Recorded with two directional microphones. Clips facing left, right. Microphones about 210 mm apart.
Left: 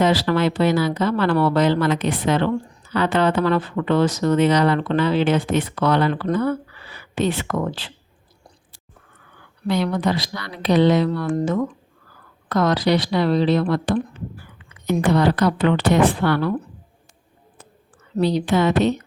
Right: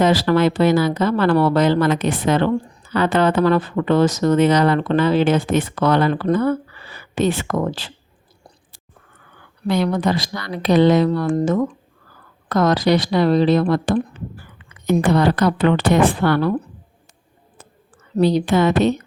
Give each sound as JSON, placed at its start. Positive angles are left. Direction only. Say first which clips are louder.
{"t": 0.0, "sound": "speech", "louder": "right 3 dB", "side_deg": -45}
{"t": 9.6, "sound": "speech", "louder": "right 2 dB", "side_deg": -45}
{"t": 12.5, "sound": "speech", "louder": "right 2 dB", "side_deg": -45}
{"t": 18.2, "sound": "speech", "louder": "right 3 dB", "side_deg": -45}